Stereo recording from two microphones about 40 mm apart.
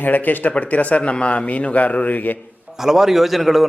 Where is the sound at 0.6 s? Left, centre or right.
Left.